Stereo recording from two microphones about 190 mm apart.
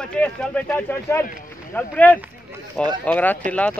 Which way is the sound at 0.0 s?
5° left (ahead or behind).